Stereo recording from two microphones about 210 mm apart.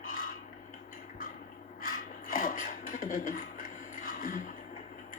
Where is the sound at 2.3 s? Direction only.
40° left (ahead or behind).